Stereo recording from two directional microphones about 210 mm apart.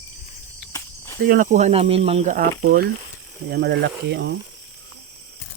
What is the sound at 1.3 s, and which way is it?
Speech, 40° right (ahead or behind).